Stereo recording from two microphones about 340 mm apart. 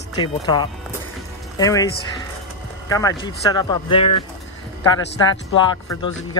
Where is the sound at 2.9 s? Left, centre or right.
Centre.